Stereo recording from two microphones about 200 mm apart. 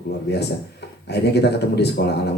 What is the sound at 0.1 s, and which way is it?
Speech, 55° left (ahead or behind).